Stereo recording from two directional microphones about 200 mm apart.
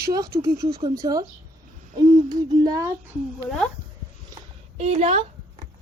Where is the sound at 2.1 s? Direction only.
20° right (ahead or behind).